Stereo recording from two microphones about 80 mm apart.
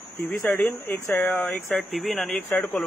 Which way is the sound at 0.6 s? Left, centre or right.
Left.